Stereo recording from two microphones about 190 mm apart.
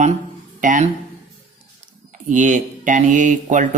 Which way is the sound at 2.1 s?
40° right (ahead or behind).